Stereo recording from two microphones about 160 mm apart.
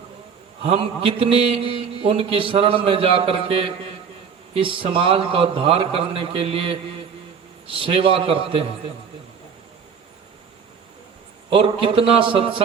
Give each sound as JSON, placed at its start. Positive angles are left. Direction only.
{"t": 0.6, "sound": "a man's voice", "side_deg": -35}
{"t": 11.5, "sound": "a man's voice", "side_deg": -35}